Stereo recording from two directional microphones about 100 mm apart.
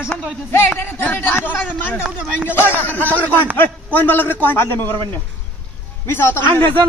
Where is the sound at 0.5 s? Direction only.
20° left (ahead or behind).